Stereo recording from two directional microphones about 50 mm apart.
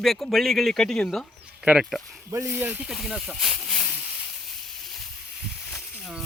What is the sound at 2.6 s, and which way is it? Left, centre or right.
Speech, right.